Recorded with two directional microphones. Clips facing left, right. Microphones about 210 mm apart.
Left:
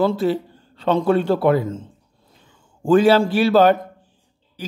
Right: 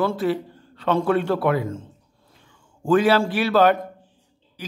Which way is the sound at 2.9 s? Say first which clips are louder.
Left 4 dB; 30° left (ahead or behind).